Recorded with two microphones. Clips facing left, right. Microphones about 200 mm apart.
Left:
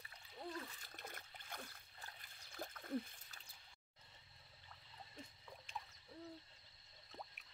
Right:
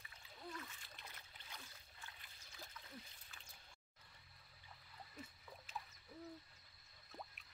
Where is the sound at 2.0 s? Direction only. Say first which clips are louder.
Left 2 dB; 45° left (ahead or behind).